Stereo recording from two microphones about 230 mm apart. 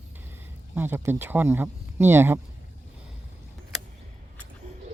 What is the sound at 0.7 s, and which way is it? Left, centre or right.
Speech, centre.